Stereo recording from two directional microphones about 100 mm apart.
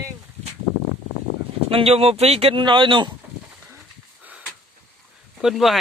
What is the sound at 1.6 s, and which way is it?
Speech, 80° right.